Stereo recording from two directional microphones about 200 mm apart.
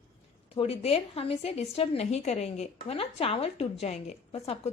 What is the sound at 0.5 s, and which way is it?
A woman's voice, 30° left (ahead or behind).